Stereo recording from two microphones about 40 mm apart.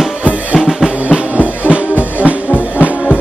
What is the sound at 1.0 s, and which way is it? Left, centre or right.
Music, right.